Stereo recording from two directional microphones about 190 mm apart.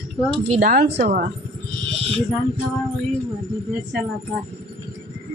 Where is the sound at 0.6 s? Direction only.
55° right (ahead or behind).